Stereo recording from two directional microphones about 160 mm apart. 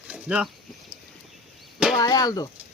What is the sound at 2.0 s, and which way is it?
Speech, 25° left (ahead or behind).